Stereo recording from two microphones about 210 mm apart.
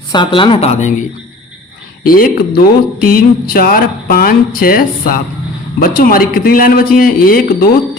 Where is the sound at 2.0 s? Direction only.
40° left (ahead or behind).